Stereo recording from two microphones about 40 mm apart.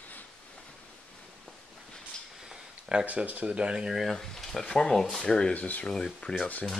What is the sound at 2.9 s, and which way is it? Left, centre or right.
Speech, right.